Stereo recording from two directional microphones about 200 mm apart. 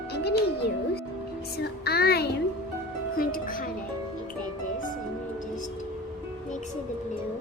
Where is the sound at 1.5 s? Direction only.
50° left (ahead or behind).